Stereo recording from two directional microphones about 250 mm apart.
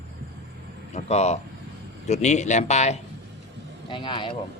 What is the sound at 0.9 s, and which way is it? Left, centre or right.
A man's voice, left.